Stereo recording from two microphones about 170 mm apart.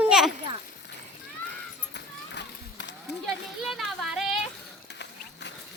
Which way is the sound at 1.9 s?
85° left.